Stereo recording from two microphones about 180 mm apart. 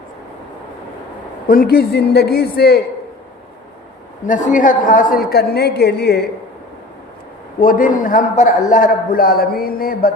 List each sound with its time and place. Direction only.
1.5 s a woman's voice: 55° left (ahead or behind)
4.3 s a woman's voice: 45° left (ahead or behind); by 6.2 s 65° left (ahead or behind)
7.6 s a man's voice: 50° left (ahead or behind)